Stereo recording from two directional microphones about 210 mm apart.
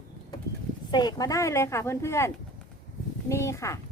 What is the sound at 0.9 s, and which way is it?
A child's voice, 20° left (ahead or behind).